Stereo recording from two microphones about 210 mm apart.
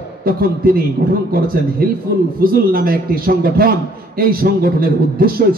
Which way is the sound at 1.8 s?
45° right (ahead or behind).